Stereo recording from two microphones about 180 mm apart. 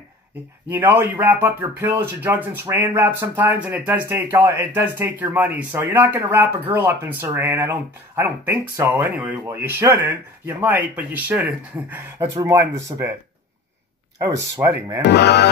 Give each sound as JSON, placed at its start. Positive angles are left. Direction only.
{"t": 0.7, "sound": "speech", "side_deg": -10}
{"t": 14.6, "sound": "speech", "side_deg": -15}
{"t": 15.0, "sound": "speech", "side_deg": 70}